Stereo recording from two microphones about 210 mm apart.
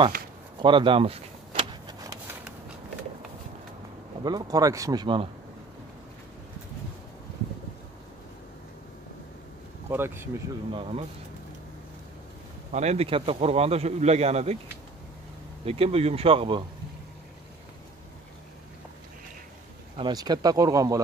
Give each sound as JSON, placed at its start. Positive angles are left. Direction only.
{"t": 0.6, "sound": "a sound", "side_deg": -25}
{"t": 4.2, "sound": "speech", "side_deg": -20}
{"t": 9.8, "sound": "speech", "side_deg": -10}
{"t": 10.7, "sound": "speech", "side_deg": -25}
{"t": 12.7, "sound": "speech", "side_deg": -30}
{"t": 15.6, "sound": "speech", "side_deg": -30}
{"t": 20.0, "sound": "speech", "side_deg": -20}